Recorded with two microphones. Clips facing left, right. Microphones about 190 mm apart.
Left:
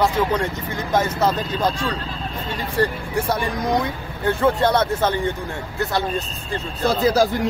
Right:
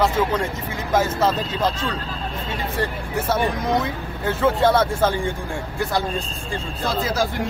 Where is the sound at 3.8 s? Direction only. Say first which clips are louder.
Left 2 dB; 5° right (ahead or behind).